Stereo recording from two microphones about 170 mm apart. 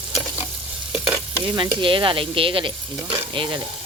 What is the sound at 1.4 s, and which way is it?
Speech, 30° right (ahead or behind).